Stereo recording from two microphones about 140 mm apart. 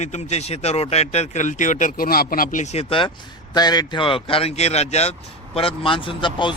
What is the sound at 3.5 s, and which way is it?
A man's voice, 30° left (ahead or behind).